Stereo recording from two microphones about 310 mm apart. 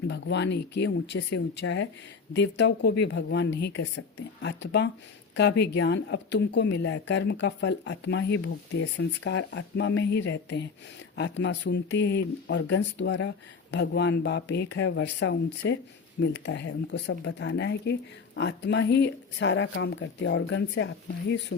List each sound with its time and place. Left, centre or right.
0.1 s speech: left